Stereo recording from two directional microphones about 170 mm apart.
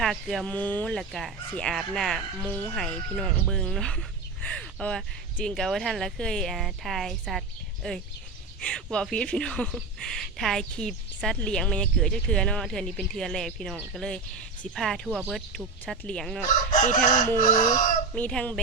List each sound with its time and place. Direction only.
0.0 s speech: centre (ahead or behind)
16.7 s chicken: 50° left (ahead or behind)
18.1 s speech: 5° left (ahead or behind)